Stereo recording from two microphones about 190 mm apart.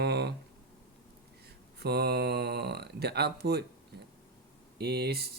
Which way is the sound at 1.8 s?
60° right (ahead or behind).